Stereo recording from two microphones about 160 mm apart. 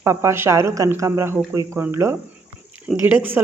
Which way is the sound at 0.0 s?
15° right (ahead or behind).